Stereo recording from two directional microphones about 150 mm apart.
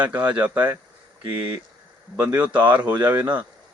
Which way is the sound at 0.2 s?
10° right (ahead or behind).